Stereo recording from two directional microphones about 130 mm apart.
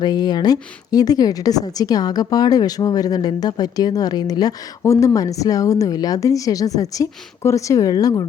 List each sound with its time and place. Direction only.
0.0 s a woman's voice: 30° left (ahead or behind)